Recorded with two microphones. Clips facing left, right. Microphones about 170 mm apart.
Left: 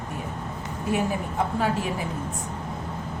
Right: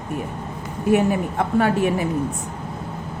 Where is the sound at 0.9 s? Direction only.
60° right (ahead or behind).